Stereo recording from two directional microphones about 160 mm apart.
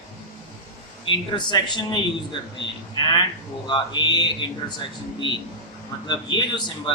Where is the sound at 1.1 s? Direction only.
30° left (ahead or behind).